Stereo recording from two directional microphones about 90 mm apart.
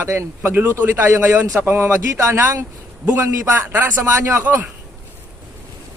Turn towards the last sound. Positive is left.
turn(degrees=-25)  # may be behind; listen again after turning